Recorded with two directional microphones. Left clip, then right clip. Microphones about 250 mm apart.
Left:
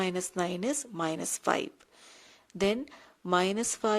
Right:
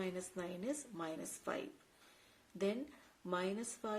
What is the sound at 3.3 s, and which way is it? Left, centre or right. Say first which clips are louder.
Speech: left 13 dB; left.